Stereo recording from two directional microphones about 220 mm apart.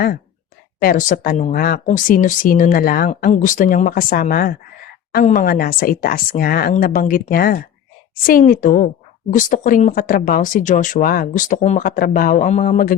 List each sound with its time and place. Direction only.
0.8 s speech: 40° left (ahead or behind)